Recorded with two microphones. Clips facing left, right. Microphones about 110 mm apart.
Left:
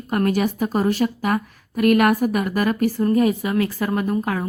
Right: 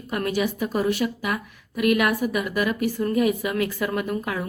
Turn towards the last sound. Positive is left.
turn(degrees=35)  # may be behind; listen again after turning